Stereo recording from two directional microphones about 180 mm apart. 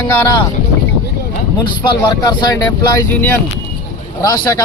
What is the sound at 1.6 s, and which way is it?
A man's voice, 25° left (ahead or behind).